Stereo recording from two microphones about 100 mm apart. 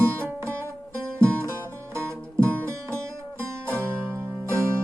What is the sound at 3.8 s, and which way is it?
Music, 25° right (ahead or behind).